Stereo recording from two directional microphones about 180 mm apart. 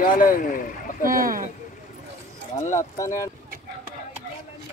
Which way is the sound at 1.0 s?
55° right (ahead or behind).